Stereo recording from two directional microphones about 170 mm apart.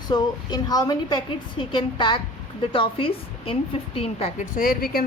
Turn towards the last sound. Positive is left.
turn(degrees=60)  # may be behind; listen again after turning